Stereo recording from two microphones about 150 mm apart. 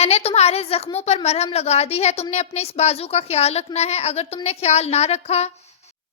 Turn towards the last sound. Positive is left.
turn(degrees=45)  # may be behind; listen again after turning